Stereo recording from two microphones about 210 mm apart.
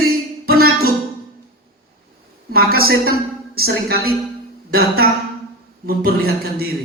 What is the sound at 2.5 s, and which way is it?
A woman's voice, 45° right (ahead or behind).